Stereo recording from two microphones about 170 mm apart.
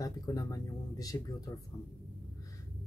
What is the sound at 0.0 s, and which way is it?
Speech, 20° left (ahead or behind).